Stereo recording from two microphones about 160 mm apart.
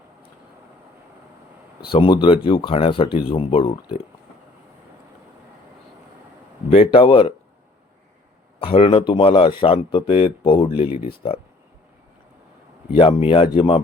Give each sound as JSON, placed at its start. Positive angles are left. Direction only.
{"t": 1.9, "sound": "speech", "side_deg": 30}
{"t": 6.7, "sound": "speech", "side_deg": 35}
{"t": 8.6, "sound": "speech", "side_deg": 35}
{"t": 12.9, "sound": "speech", "side_deg": 35}